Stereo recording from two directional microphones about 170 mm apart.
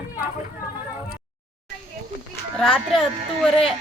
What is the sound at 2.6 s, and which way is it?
Speech, centre (ahead or behind).